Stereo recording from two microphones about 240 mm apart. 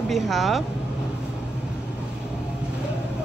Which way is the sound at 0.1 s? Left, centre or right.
Centre.